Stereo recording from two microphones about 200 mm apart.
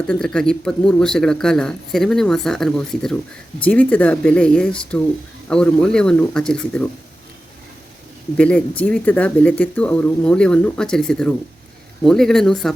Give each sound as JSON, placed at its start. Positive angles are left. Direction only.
{"t": 0.1, "sound": "a man's voice", "side_deg": 5}
{"t": 8.4, "sound": "a man's voice", "side_deg": 5}